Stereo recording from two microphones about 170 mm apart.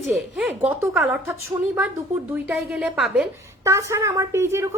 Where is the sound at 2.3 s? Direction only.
Centre (ahead or behind).